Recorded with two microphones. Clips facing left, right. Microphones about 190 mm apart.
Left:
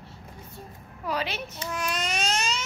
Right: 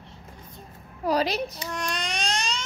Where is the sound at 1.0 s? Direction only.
35° right (ahead or behind).